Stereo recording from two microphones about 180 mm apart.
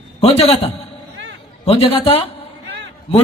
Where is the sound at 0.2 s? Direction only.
35° left (ahead or behind).